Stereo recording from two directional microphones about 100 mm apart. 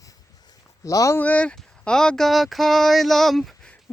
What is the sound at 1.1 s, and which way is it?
Speech, 15° left (ahead or behind).